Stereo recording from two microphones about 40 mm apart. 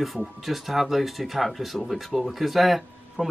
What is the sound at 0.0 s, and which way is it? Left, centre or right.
Speech, centre.